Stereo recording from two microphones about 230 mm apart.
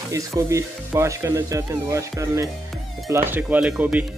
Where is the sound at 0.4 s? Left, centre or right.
Centre.